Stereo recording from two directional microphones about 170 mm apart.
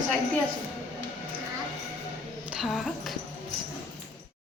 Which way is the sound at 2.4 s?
5° right (ahead or behind).